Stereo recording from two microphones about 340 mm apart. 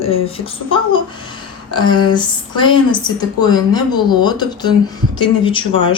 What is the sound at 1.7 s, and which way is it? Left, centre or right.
Speech, centre.